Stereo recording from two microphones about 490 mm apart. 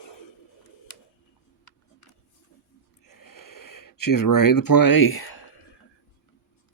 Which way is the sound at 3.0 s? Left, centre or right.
Left.